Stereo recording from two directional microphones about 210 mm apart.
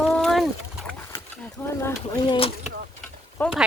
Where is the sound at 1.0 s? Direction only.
10° left (ahead or behind).